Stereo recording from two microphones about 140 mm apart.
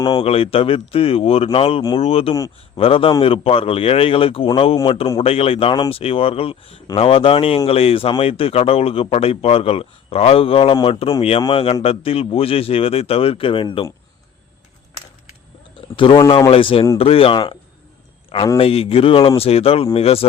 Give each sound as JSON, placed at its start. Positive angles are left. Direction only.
{"t": 0.2, "sound": "a man's voice", "side_deg": 45}
{"t": 5.2, "sound": "a man's voice", "side_deg": 45}
{"t": 10.8, "sound": "a man's voice", "side_deg": 30}
{"t": 16.0, "sound": "a man's voice", "side_deg": 40}